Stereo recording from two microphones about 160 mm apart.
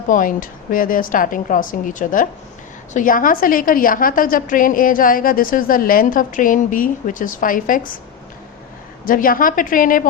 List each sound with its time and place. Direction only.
0.1 s a woman's voice: 60° left (ahead or behind)
9.0 s a woman's voice: 60° left (ahead or behind)